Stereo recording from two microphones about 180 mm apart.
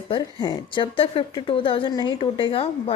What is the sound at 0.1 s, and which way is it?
A woman's voice, 25° left (ahead or behind).